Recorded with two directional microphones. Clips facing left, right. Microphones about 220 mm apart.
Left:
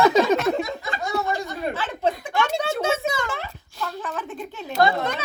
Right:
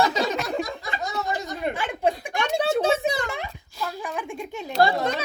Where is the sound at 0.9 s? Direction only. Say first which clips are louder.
Left 3 dB; 15° right (ahead or behind).